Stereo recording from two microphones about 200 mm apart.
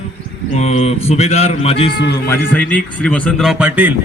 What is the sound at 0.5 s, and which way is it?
A man's voice, 35° left (ahead or behind).